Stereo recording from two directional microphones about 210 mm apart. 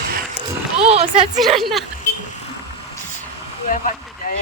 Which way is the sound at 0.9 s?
30° right (ahead or behind).